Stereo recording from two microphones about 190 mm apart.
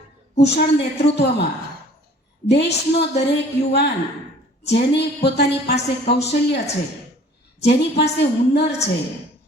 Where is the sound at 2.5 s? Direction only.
65° left (ahead or behind).